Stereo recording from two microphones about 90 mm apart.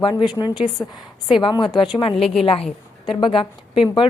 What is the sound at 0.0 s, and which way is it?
Speech, 60° left (ahead or behind).